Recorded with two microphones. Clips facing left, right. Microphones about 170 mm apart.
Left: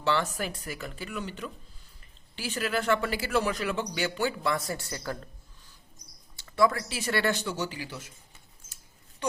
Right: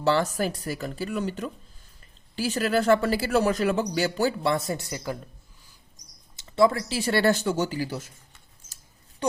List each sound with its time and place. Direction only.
0.0 s speech: 40° right (ahead or behind); by 5.7 s 10° right (ahead or behind)
6.3 s speech: 25° right (ahead or behind); by 8.1 s 40° right (ahead or behind)